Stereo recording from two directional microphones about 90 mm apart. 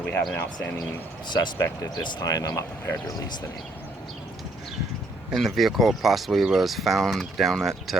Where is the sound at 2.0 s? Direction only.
55° left (ahead or behind).